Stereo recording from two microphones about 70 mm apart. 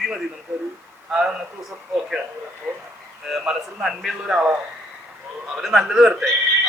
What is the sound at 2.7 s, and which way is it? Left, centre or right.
A man's voice, centre.